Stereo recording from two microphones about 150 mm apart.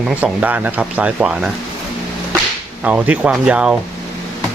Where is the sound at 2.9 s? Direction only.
10° right (ahead or behind).